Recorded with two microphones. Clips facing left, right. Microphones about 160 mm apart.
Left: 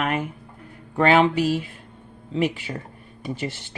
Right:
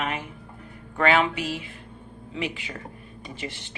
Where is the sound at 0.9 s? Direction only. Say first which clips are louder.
Left 5 dB; 35° left (ahead or behind).